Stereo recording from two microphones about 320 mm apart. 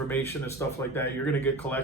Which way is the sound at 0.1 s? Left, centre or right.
Centre.